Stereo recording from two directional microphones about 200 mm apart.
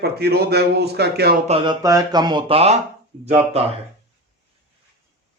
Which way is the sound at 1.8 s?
20° right (ahead or behind).